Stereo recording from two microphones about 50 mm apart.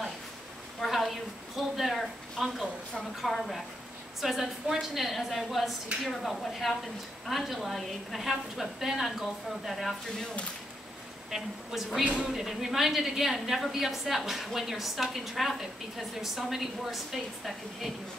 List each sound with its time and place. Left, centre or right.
0.7 s a sound: centre
4.2 s a woman's voice: centre
11.2 s a woman's voice: centre
12.0 s speech: right
12.3 s a woman's voice: centre